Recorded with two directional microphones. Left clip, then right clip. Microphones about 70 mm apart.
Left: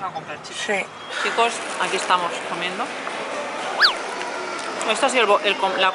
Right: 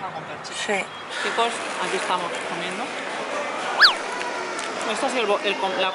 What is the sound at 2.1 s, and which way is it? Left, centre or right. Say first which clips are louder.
Speech: left 4 dB; centre.